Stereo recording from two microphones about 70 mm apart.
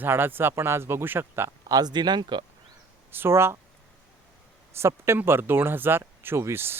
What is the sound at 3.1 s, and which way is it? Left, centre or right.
Speech, right.